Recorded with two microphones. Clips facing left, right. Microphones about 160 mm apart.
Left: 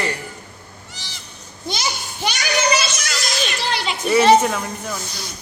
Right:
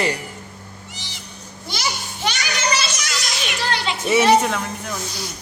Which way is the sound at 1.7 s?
15° left (ahead or behind).